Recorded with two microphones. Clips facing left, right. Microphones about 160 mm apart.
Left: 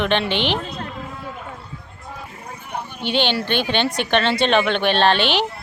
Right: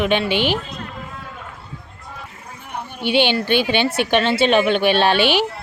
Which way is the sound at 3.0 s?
10° right (ahead or behind).